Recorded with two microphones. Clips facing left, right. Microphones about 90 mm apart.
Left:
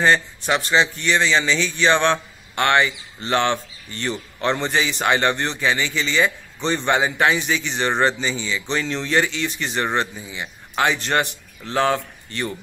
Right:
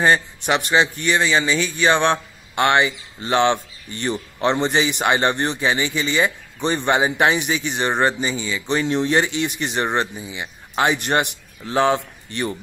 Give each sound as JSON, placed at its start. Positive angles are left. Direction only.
{"t": 0.5, "sound": "a man's voice", "side_deg": -15}